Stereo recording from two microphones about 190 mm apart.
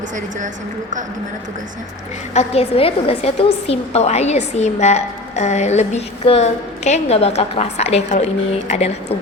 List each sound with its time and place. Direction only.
0.3 s a woman's voice: 40° right (ahead or behind)
2.3 s a woman's voice: 35° left (ahead or behind)